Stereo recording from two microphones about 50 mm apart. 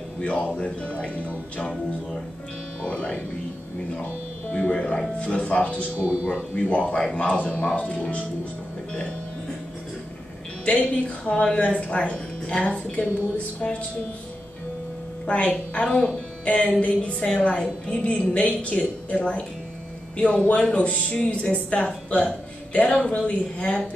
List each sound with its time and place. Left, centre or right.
0.2 s a woman's voice: left
2.8 s speech: left
4.0 s music: left
5.2 s a woman's voice: left
5.9 s speech: right
6.5 s a woman's voice: left
10.6 s a woman's voice: left
15.2 s a woman's voice: left